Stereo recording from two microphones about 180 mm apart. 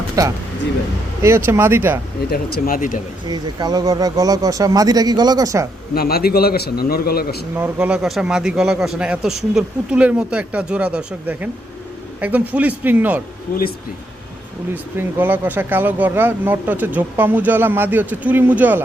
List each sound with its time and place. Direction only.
1.5 s speech: 15° right (ahead or behind)
2.3 s speech: 55° left (ahead or behind)
3.2 s speech: 20° right (ahead or behind)
5.9 s a man's voice: 60° left (ahead or behind)
7.5 s a man's voice: 10° right (ahead or behind)
14.9 s speech: 10° right (ahead or behind)